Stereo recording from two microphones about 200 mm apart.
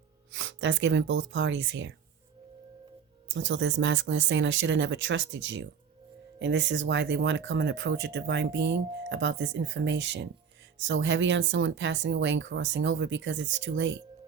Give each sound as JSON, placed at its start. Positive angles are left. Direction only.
{"t": 0.3, "sound": "speech", "side_deg": -70}
{"t": 3.2, "sound": "speech", "side_deg": -60}